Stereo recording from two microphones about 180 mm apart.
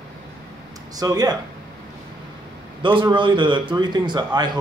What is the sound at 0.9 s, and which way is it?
Speech, 20° right (ahead or behind).